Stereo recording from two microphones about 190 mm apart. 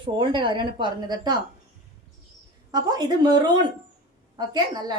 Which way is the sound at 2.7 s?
20° right (ahead or behind).